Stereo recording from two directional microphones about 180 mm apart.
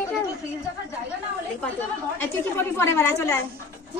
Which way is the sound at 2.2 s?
10° left (ahead or behind).